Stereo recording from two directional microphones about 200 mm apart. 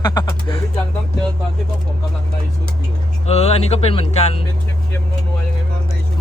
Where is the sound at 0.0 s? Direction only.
20° left (ahead or behind).